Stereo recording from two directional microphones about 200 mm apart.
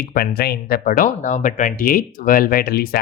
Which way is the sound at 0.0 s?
50° left (ahead or behind).